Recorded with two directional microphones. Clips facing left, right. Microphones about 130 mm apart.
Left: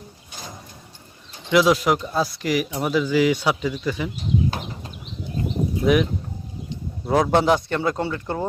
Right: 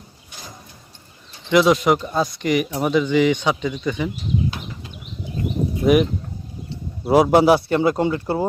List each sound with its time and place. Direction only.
1.5 s speech: centre (ahead or behind)
4.5 s a sound: 40° left (ahead or behind)
5.8 s speech: 5° right (ahead or behind)